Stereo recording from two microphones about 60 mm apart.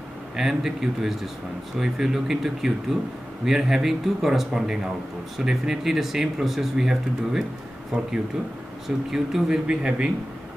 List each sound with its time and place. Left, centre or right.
0.4 s speech: centre
7.9 s speech: centre
8.8 s speech: centre